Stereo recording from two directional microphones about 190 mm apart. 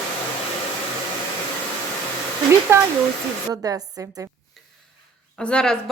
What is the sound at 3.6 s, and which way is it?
Speech, 20° right (ahead or behind).